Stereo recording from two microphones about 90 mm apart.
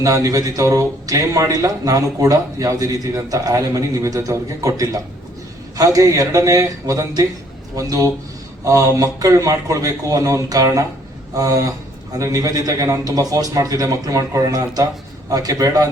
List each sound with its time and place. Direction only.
0.0 s a man's voice: 40° right (ahead or behind)